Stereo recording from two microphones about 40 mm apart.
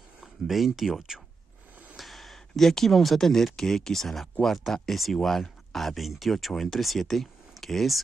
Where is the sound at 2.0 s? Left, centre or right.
Centre.